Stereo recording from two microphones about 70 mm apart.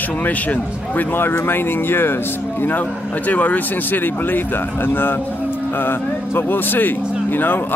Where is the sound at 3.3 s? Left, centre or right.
Left.